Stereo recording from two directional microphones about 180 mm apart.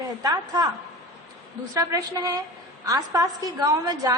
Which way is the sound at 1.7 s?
20° right (ahead or behind).